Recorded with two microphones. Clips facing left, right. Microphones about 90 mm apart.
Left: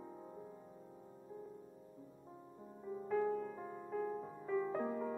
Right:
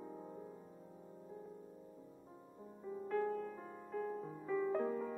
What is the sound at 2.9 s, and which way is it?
Music, 5° left (ahead or behind).